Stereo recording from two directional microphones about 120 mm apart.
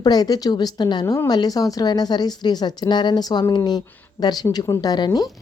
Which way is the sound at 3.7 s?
35° left (ahead or behind).